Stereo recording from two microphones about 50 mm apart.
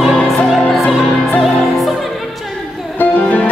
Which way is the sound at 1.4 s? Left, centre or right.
Centre.